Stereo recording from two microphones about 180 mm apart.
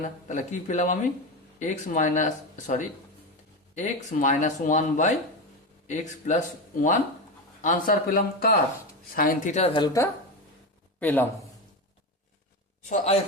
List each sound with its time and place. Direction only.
0.0 s speech: 40° left (ahead or behind); by 10.1 s 20° left (ahead or behind)
11.0 s a man's voice: 10° left (ahead or behind)